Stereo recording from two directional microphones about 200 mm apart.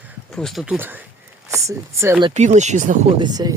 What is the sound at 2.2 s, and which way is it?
Speech, 35° right (ahead or behind).